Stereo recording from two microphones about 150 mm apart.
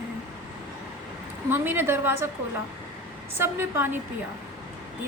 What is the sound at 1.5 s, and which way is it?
Speech, 15° right (ahead or behind).